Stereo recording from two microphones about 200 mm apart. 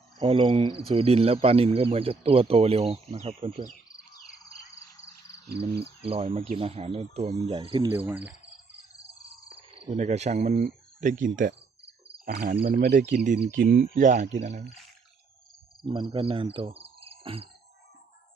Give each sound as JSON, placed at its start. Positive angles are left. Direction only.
{"t": 0.2, "sound": "speech", "side_deg": -25}
{"t": 5.7, "sound": "speech", "side_deg": -55}
{"t": 6.1, "sound": "speech", "side_deg": -30}
{"t": 8.0, "sound": "cricket", "side_deg": -5}
{"t": 9.6, "sound": "speech", "side_deg": -30}
{"t": 15.8, "sound": "speech", "side_deg": -25}